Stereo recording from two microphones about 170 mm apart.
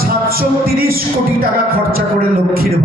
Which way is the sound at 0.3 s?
60° right (ahead or behind).